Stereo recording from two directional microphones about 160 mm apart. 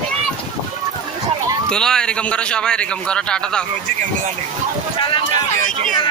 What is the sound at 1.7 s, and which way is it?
A man's voice, 5° left (ahead or behind).